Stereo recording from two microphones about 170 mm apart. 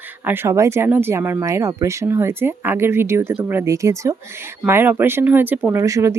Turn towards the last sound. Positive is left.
turn(degrees=-20)  # may be behind; listen again after turning